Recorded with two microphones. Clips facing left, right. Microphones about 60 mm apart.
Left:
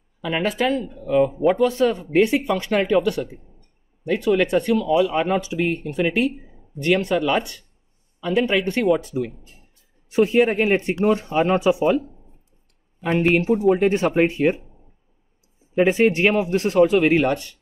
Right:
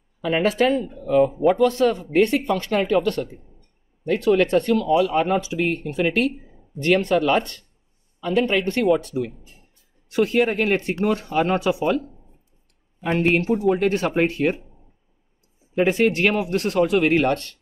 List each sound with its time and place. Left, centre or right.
0.2 s speech: centre
0.9 s speech: centre
10.0 s speech: left
13.7 s speech: left
15.7 s speech: centre
16.9 s speech: centre